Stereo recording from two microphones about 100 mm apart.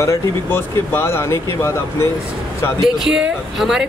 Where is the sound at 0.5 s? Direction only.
25° left (ahead or behind).